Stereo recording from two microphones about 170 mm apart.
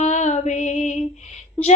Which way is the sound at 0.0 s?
45° left (ahead or behind).